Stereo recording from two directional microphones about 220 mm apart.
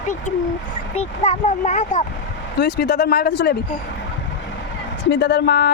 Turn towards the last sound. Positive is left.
turn(degrees=45)  # may be behind; listen again after turning